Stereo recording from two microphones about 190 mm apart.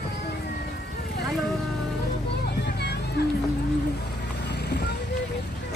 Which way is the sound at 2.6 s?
60° left (ahead or behind).